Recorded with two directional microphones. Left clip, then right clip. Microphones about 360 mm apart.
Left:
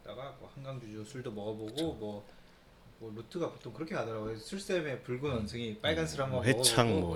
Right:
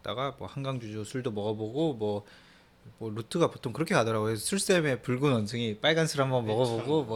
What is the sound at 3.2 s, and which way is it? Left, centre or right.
Speech, right.